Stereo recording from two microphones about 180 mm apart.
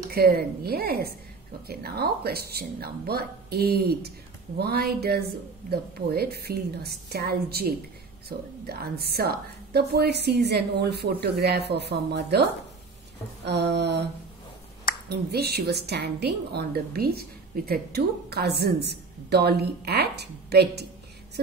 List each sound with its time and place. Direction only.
0.1 s a woman's voice: 60° right (ahead or behind)
13.5 s mantra: 70° right (ahead or behind)
15.0 s a woman's voice: 65° right (ahead or behind)